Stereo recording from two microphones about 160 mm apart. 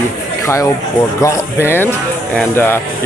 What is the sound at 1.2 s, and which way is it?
Speech, 15° left (ahead or behind).